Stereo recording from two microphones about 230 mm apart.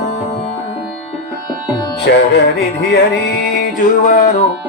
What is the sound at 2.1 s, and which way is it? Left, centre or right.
Music, left.